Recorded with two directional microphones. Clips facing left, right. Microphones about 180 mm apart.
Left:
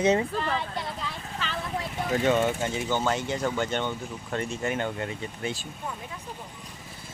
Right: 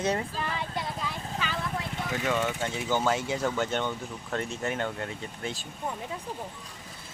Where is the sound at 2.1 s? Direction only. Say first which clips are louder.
Left 6 dB; 30° left (ahead or behind).